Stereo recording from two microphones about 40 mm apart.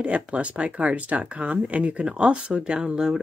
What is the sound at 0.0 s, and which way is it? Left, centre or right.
Speech, right.